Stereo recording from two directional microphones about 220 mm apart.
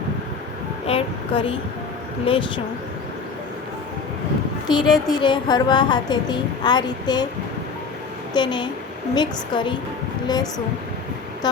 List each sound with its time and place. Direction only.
0.9 s a woman's voice: 25° left (ahead or behind)
4.7 s a woman's voice: 20° left (ahead or behind)
8.3 s a woman's voice: 20° left (ahead or behind)